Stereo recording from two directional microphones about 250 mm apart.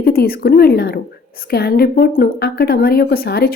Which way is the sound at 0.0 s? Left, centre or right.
Left.